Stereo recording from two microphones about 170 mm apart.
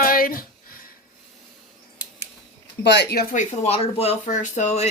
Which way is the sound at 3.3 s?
40° left (ahead or behind).